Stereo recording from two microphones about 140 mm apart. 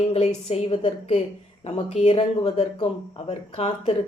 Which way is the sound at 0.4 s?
50° left (ahead or behind).